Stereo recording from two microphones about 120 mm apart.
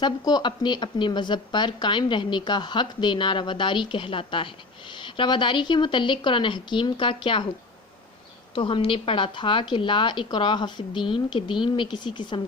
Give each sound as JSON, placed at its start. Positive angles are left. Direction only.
{"t": 0.0, "sound": "a woman's voice", "side_deg": 35}
{"t": 8.5, "sound": "a woman's voice", "side_deg": 45}